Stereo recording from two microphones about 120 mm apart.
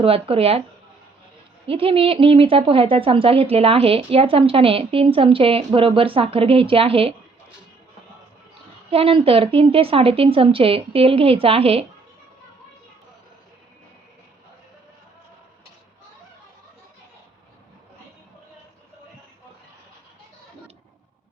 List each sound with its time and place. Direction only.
0.0 s a woman's voice: 55° right (ahead or behind)
1.6 s a woman's voice: 50° right (ahead or behind)
8.9 s a woman's voice: 50° right (ahead or behind)